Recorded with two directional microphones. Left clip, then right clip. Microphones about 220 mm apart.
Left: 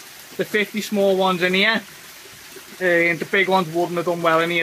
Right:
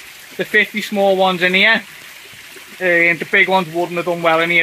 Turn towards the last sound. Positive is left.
turn(degrees=-20)  # may be behind; listen again after turning